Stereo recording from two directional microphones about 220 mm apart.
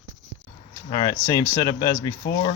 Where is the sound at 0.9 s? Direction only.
20° left (ahead or behind).